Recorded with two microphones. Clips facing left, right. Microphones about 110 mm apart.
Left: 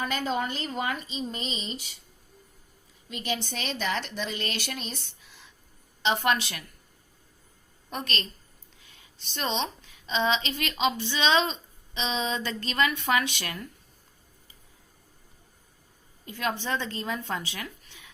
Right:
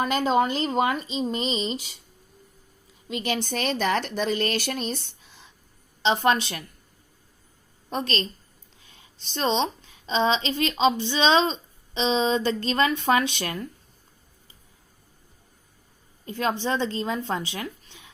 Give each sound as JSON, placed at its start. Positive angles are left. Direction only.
{"t": 0.0, "sound": "speech", "side_deg": -90}
{"t": 3.1, "sound": "speech", "side_deg": -90}
{"t": 3.3, "sound": "speech", "side_deg": -50}
{"t": 6.0, "sound": "a woman's voice", "side_deg": -30}
{"t": 7.9, "sound": "a woman's voice", "side_deg": -30}
{"t": 16.2, "sound": "a woman's voice", "side_deg": -30}